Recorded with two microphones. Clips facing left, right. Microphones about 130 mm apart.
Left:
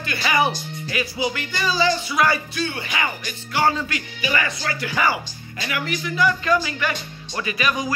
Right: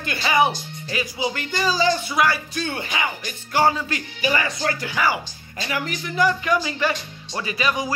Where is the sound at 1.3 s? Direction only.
40° right (ahead or behind).